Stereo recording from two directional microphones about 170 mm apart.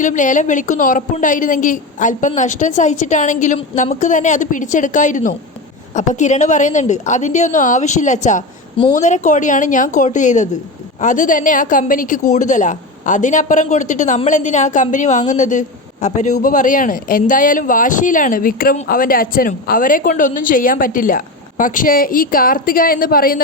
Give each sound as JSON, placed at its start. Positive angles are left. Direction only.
{"t": 0.0, "sound": "a man's voice", "side_deg": 50}